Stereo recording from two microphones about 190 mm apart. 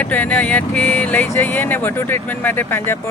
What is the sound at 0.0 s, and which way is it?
Speech, 10° left (ahead or behind).